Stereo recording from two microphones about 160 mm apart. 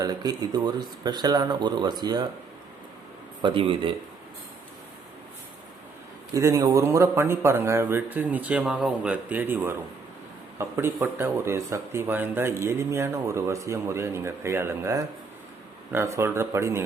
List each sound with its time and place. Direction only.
0.0 s speech: 25° right (ahead or behind)
3.4 s speech: 35° right (ahead or behind)
6.3 s speech: 20° right (ahead or behind)